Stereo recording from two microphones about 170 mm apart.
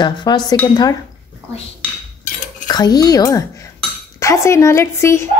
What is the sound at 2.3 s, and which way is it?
Cutlery, 50° left (ahead or behind).